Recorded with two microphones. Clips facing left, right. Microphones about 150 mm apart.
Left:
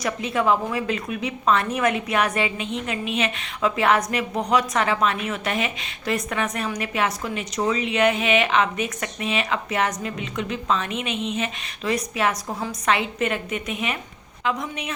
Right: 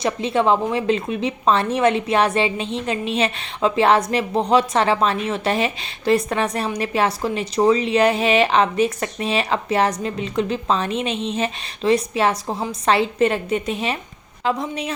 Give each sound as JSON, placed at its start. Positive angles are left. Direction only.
{"t": 0.0, "sound": "a woman's voice", "side_deg": -30}